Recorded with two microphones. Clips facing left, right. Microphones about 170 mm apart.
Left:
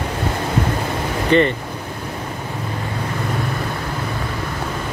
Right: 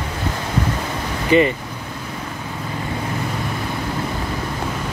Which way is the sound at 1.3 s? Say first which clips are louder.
Even; 5° right (ahead or behind).